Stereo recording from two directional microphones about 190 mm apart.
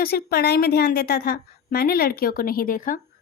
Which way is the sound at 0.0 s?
55° left (ahead or behind).